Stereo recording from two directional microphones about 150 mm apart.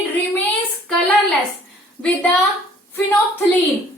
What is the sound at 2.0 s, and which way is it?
Speech, 10° right (ahead or behind).